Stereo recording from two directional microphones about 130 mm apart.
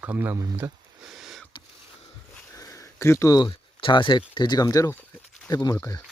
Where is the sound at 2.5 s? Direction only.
25° left (ahead or behind).